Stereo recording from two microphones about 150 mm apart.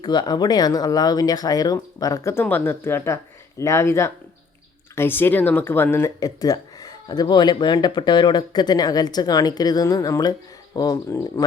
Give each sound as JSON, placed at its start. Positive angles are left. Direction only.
{"t": 0.0, "sound": "speech", "side_deg": 30}